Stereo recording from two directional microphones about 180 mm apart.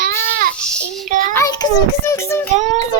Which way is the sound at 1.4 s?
20° left (ahead or behind).